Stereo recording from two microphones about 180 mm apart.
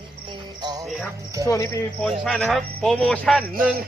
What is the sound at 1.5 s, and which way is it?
Speech, 15° left (ahead or behind).